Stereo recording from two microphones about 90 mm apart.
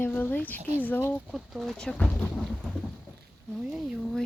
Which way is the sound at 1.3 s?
Centre (ahead or behind).